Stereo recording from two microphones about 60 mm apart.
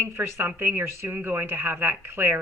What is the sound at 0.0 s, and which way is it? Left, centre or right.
Speech, right.